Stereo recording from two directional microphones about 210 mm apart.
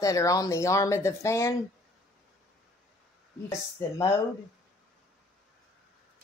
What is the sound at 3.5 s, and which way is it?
Speech, 15° left (ahead or behind).